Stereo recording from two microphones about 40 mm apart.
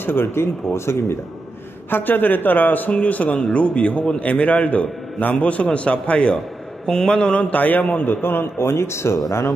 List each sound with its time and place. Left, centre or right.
0.0 s speech: left
1.9 s a man's voice: left
2.9 s a man's voice: left
6.9 s mantra: centre
7.5 s a man's voice: left
8.2 s speech: left